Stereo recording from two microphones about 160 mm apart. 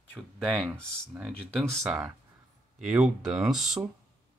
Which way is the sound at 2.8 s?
5° right (ahead or behind).